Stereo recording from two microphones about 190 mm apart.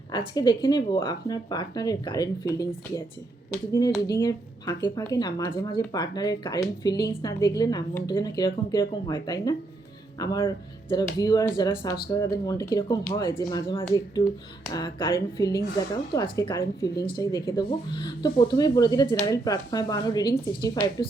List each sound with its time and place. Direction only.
0.1 s speech: 20° left (ahead or behind)